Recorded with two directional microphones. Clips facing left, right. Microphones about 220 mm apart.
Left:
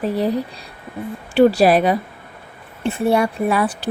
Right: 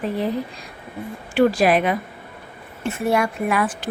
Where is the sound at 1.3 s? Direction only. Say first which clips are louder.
Left 4 dB; 35° left (ahead or behind).